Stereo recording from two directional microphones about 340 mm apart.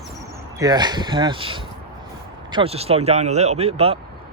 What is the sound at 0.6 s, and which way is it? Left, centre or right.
Speech, centre.